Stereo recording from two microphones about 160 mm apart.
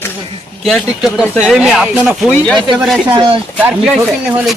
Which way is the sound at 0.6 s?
Centre (ahead or behind).